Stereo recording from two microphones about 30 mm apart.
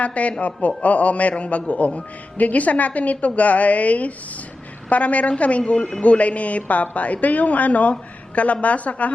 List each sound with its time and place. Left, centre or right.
0.0 s a man's voice: left